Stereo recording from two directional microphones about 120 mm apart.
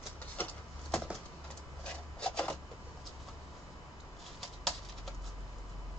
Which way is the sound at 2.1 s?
10° left (ahead or behind).